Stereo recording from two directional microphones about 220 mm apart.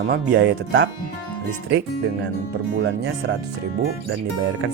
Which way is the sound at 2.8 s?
55° right (ahead or behind).